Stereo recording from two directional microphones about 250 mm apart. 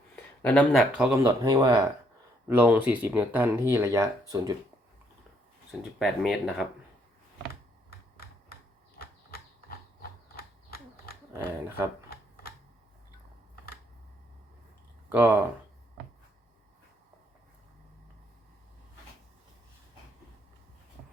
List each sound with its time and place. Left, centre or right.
0.4 s speech: centre
6.0 s speech: centre
7.9 s computer keyboard: left
9.0 s a sound: left
11.3 s speech: centre
12.1 s a sound: left
15.1 s speech: centre